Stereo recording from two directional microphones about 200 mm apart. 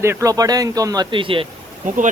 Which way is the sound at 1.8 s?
40° right (ahead or behind).